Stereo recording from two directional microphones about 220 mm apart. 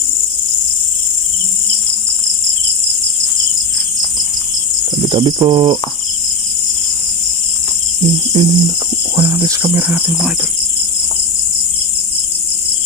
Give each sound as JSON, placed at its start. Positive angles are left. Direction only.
{"t": 5.0, "sound": "speech", "side_deg": -20}
{"t": 8.3, "sound": "speech", "side_deg": -25}